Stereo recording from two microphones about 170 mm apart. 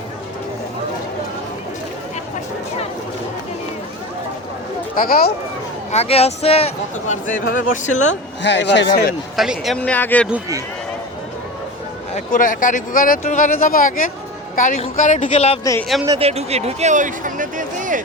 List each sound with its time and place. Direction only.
4.9 s speech: 60° left (ahead or behind)
5.9 s speech: 35° left (ahead or behind)
8.4 s speech: 90° left; by 9.1 s 70° left (ahead or behind)
9.3 s speech: centre (ahead or behind)
12.1 s speech: 50° left (ahead or behind)
16.1 s speech: 35° right (ahead or behind)